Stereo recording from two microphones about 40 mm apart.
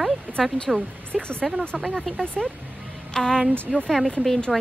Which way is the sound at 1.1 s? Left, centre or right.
Centre.